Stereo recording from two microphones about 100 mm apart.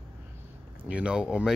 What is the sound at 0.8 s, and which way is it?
Speech, 10° right (ahead or behind).